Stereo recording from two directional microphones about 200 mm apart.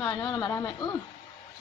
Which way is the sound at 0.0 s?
20° left (ahead or behind).